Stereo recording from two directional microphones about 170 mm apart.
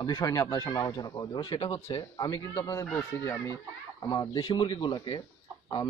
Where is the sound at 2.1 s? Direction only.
20° left (ahead or behind).